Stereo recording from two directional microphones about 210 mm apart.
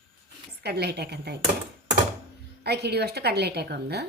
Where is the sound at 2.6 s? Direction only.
50° right (ahead or behind).